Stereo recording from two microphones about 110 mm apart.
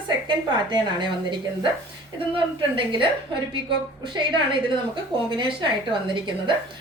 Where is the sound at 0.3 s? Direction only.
45° right (ahead or behind).